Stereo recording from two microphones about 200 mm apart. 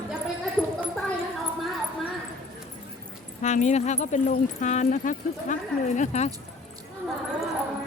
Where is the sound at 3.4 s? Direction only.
35° left (ahead or behind).